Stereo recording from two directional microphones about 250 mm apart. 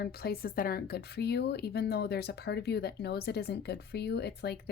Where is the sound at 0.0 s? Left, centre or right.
Left.